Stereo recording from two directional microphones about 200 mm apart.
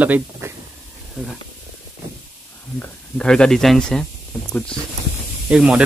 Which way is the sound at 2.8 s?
5° left (ahead or behind).